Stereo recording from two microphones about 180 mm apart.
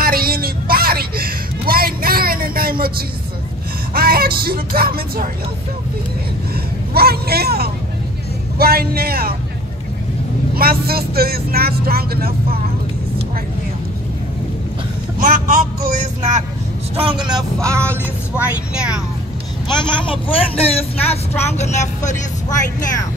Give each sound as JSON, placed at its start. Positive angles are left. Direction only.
{"t": 0.0, "sound": "a sound", "side_deg": -55}
{"t": 3.9, "sound": "music", "side_deg": -55}
{"t": 6.5, "sound": "vehicle", "side_deg": -60}
{"t": 8.5, "sound": "speech", "side_deg": -60}
{"t": 10.5, "sound": "speech", "side_deg": -55}
{"t": 15.1, "sound": "speech", "side_deg": -45}
{"t": 16.9, "sound": "vehicle", "side_deg": -30}
{"t": 19.7, "sound": "speech", "side_deg": 25}